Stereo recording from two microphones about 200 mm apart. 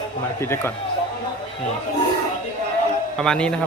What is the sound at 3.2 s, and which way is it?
Speech, 5° left (ahead or behind).